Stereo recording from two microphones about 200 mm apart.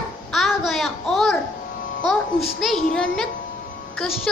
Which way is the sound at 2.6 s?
5° left (ahead or behind).